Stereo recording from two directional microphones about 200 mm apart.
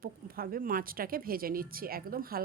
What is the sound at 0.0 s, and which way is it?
Speech, 45° right (ahead or behind).